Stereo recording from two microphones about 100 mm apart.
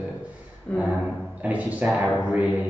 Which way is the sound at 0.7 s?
15° left (ahead or behind).